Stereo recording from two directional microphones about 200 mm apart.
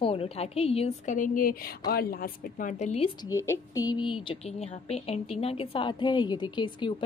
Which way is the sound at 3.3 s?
15° left (ahead or behind).